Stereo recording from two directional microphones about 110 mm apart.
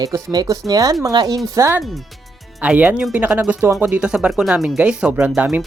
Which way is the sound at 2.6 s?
15° right (ahead or behind).